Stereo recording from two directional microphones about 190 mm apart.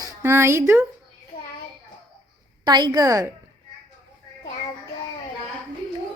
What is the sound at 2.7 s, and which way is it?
Speech, 20° right (ahead or behind).